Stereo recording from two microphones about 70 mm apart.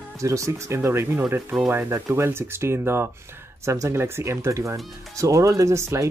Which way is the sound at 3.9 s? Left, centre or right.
Right.